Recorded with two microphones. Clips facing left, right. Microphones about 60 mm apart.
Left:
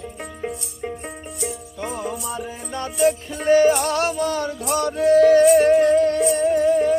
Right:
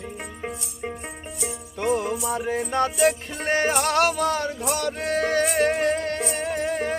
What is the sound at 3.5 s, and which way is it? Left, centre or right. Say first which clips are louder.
Music: left 8 dB; right.